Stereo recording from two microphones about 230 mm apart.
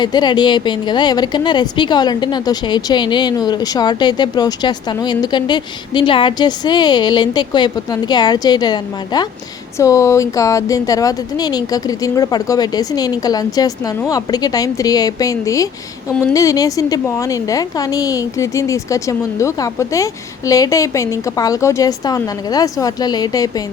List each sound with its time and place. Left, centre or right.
0.0 s speech: centre